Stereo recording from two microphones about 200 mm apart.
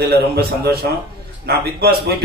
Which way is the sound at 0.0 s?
50° right (ahead or behind).